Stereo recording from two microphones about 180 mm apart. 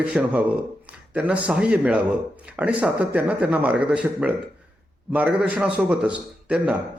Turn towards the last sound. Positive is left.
turn(degrees=-5)  # may be behind; listen again after turning